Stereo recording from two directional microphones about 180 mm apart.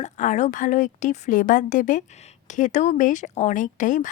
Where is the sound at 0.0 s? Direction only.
40° left (ahead or behind).